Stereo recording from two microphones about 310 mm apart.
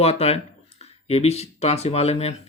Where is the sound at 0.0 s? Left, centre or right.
Centre.